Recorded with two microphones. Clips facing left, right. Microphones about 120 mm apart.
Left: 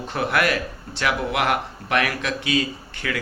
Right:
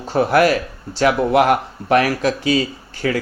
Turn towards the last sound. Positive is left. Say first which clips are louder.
# right 7 dB
turn(degrees=-40)  # may be behind; listen again after turning